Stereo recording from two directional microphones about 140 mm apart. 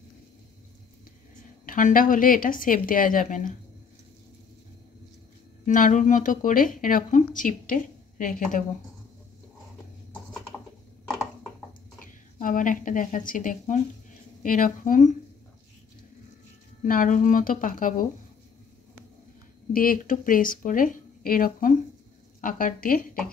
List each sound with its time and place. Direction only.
1.7 s speech: 75° left (ahead or behind)
5.7 s speech: 65° left (ahead or behind)
12.0 s a woman's voice: 75° left (ahead or behind)
16.8 s speech: 75° left (ahead or behind)
19.7 s speech: 90° left